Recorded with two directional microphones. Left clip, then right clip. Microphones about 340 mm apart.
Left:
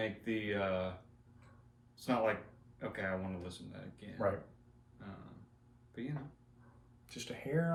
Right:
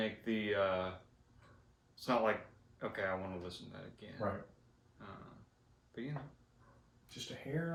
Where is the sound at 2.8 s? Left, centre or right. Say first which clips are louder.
Right 1 dB; centre.